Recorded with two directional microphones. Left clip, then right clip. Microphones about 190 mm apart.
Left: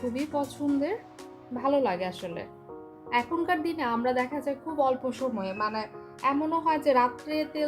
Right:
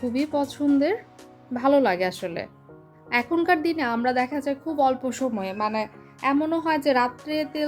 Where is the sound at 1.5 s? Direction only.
50° right (ahead or behind).